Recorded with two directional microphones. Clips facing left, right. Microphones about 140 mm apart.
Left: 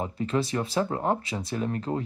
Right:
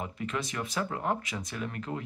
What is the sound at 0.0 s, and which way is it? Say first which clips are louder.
Speech: left 7 dB; 30° left (ahead or behind).